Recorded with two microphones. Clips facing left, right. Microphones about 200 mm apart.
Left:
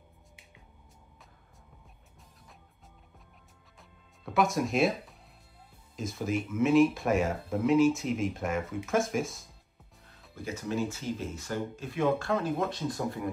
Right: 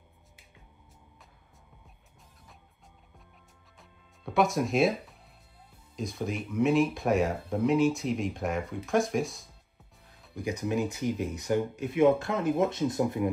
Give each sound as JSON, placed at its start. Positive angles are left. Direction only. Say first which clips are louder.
{"t": 4.2, "sound": "speech", "louder": "right 1 dB", "side_deg": 0}
{"t": 10.3, "sound": "speech", "louder": "right 3 dB", "side_deg": -15}